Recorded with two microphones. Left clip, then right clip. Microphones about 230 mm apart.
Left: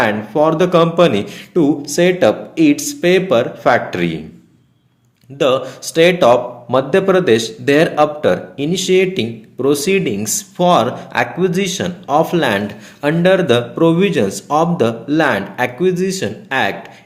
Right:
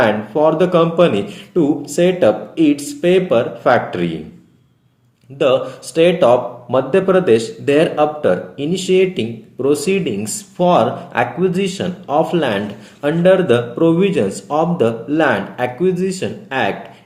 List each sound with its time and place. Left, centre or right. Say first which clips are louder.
0.0 s speech: even; left
5.4 s speech: even; left